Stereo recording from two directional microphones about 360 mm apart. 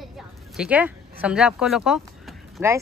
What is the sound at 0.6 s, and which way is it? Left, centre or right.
Speech, centre.